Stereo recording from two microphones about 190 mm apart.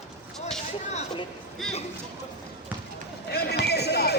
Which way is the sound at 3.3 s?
55° left (ahead or behind).